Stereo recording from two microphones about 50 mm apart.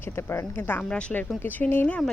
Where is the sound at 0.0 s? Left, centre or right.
Left.